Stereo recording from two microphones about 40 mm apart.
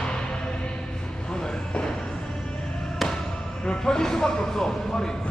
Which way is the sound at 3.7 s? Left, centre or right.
Centre.